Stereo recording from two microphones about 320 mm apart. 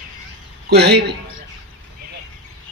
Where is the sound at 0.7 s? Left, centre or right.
Right.